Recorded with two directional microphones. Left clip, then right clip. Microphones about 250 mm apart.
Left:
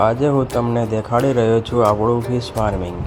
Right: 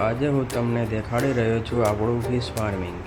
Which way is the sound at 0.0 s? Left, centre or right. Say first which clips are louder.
Left 7 dB; centre.